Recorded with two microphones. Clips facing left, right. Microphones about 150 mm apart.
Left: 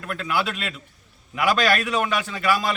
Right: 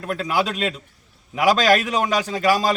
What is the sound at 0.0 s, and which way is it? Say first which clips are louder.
A man's voice: right 3 dB; 35° right (ahead or behind).